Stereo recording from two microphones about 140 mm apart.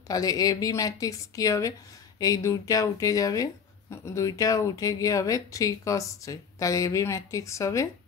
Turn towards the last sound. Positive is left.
turn(degrees=20)  # may be behind; listen again after turning